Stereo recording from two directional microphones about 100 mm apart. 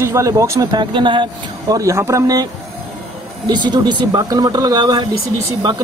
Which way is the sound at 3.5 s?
50° right (ahead or behind).